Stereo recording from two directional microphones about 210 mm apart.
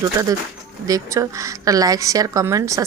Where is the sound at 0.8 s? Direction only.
15° right (ahead or behind).